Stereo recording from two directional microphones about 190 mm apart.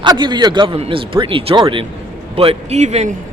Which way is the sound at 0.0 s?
25° right (ahead or behind).